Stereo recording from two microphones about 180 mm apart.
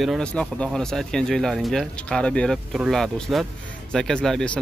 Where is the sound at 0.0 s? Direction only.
Centre (ahead or behind).